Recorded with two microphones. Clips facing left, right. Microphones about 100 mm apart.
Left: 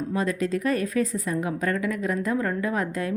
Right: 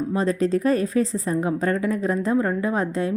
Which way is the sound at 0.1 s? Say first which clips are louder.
Right 4 dB; 30° right (ahead or behind).